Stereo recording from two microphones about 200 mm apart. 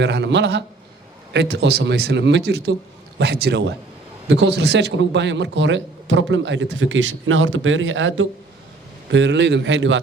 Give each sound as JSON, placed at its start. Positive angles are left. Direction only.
{"t": 0.0, "sound": "a man's voice", "side_deg": -60}